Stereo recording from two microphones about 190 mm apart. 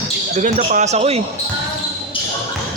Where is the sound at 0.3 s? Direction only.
45° right (ahead or behind).